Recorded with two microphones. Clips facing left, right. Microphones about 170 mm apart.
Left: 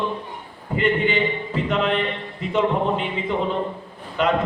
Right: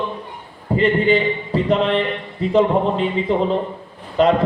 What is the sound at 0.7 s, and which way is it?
A man's voice, 35° right (ahead or behind).